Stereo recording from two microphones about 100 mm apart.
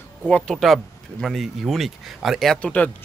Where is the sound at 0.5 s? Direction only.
Centre (ahead or behind).